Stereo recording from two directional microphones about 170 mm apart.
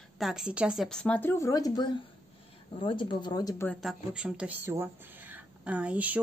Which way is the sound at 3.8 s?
5° right (ahead or behind).